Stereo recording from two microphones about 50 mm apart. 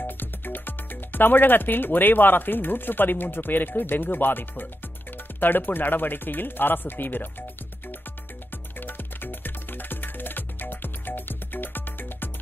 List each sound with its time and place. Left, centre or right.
0.0 s speech: left
8.7 s music: left